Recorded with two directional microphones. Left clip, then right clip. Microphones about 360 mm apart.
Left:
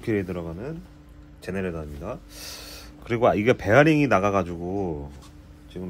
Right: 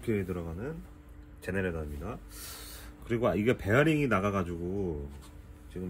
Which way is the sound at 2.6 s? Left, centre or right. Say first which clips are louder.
Left 7 dB; centre.